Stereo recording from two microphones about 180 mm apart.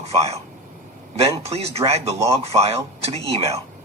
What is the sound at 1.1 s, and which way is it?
A man's voice, 35° right (ahead or behind).